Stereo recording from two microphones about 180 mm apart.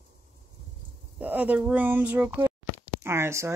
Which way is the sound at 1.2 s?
10° right (ahead or behind).